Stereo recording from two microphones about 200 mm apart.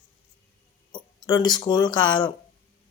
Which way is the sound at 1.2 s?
20° left (ahead or behind).